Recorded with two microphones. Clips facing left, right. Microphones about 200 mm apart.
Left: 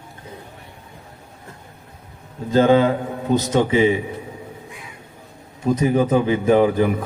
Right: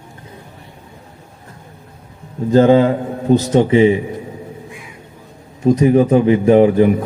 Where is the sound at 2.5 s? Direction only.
30° right (ahead or behind).